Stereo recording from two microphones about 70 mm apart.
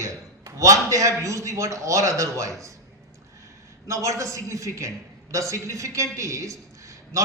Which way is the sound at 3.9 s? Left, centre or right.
Right.